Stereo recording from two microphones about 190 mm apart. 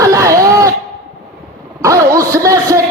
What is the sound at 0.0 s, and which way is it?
Throat clearing, 15° right (ahead or behind).